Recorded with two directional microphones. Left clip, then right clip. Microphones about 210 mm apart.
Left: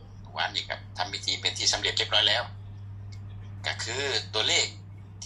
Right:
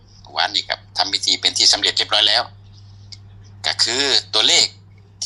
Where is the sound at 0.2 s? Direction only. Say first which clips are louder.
Right 10 dB; 50° right (ahead or behind).